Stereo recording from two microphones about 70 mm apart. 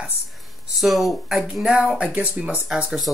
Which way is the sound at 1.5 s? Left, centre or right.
Centre.